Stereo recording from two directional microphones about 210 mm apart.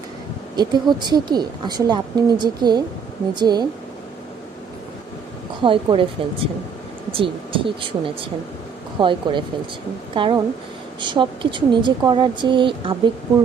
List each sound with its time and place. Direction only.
0.5 s a woman's voice: 20° right (ahead or behind)
5.6 s a woman's voice: 25° right (ahead or behind)